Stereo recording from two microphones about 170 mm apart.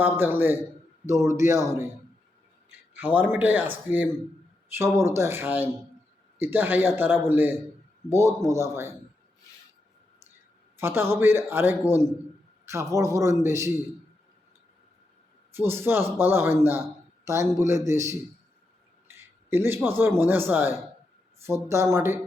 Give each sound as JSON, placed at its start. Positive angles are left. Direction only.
{"t": 0.0, "sound": "speech", "side_deg": -10}
{"t": 2.6, "sound": "a sound", "side_deg": -10}
{"t": 3.3, "sound": "speech", "side_deg": -10}
{"t": 10.8, "sound": "a man's voice", "side_deg": -15}
{"t": 15.5, "sound": "a man's voice", "side_deg": -15}